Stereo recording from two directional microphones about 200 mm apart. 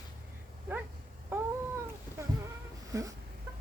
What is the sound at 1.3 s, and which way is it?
Cat, 10° right (ahead or behind).